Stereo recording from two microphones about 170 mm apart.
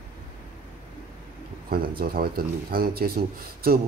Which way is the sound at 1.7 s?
60° right (ahead or behind).